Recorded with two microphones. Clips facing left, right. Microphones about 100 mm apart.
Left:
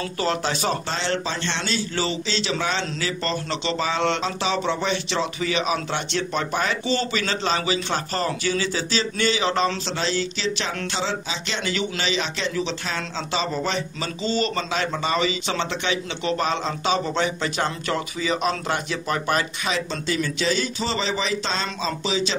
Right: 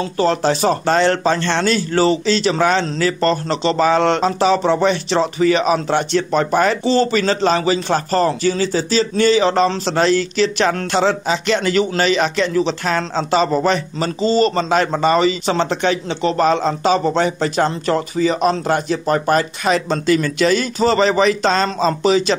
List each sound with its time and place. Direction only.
0.2 s a man's voice: 40° right (ahead or behind)
0.8 s speech: 55° right (ahead or behind)
6.8 s a man's voice: 35° right (ahead or behind)
9.8 s speech: 55° right (ahead or behind)